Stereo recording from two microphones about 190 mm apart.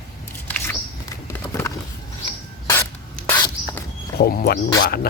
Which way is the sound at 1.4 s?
10° left (ahead or behind).